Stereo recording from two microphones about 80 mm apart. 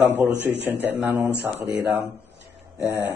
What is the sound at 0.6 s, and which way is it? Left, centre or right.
Speech, right.